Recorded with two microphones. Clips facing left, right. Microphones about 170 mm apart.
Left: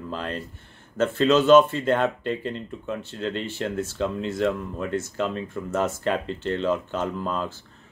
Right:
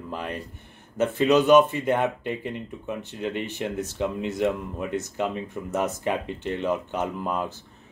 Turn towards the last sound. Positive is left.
turn(degrees=-15)  # may be behind; listen again after turning